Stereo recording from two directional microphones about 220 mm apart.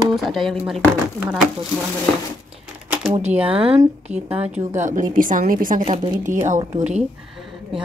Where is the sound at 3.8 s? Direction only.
10° right (ahead or behind).